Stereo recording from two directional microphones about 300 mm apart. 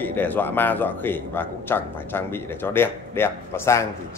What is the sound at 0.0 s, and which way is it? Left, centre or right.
A man's voice, centre.